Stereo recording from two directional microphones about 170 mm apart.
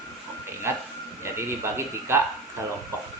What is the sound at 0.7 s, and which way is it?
Speech, 15° right (ahead or behind).